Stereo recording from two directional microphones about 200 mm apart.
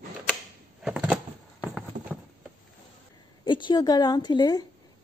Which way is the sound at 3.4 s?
25° left (ahead or behind).